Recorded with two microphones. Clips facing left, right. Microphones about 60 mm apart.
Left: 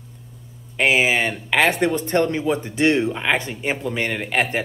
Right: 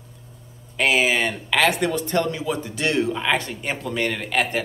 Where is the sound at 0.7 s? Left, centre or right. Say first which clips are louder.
Left 2 dB; left.